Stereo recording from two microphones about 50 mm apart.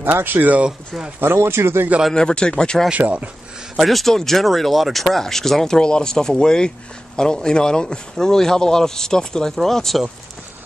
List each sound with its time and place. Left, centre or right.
0.0 s speech: right
0.7 s speech: centre
1.2 s speech: right
2.1 s speech: centre
3.0 s speech: right
3.7 s speech: centre